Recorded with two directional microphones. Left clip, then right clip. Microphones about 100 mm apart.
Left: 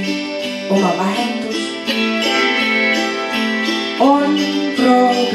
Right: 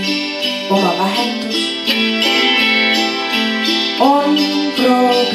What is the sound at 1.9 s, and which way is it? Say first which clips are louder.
Music: right 2 dB; 30° right (ahead or behind).